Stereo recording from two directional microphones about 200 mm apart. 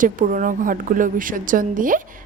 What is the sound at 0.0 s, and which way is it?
A woman's voice, 40° right (ahead or behind).